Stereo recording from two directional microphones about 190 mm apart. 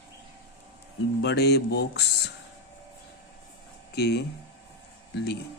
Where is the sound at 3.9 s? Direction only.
60° left (ahead or behind).